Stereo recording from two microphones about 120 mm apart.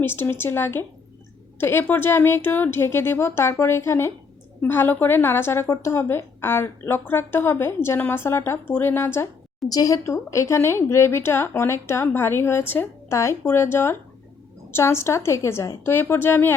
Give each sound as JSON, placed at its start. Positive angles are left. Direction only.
{"t": 0.0, "sound": "a woman's voice", "side_deg": 20}